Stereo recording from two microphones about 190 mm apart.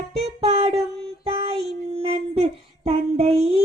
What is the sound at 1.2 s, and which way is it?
Child singing, 30° right (ahead or behind).